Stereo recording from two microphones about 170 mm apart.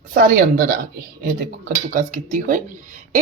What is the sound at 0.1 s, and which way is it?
Speech, 60° right (ahead or behind).